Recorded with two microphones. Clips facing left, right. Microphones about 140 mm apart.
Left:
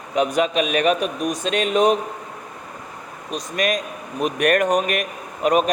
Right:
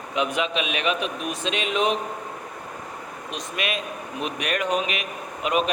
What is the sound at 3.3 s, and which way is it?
A man's voice, 40° left (ahead or behind).